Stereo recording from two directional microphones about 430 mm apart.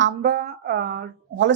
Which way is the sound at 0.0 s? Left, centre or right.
Right.